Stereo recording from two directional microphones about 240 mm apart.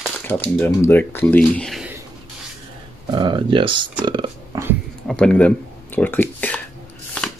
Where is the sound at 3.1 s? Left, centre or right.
Centre.